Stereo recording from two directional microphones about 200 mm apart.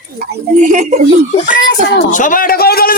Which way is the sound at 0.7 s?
35° right (ahead or behind).